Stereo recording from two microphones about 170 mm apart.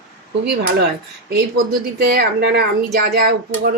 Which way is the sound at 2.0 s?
70° right (ahead or behind).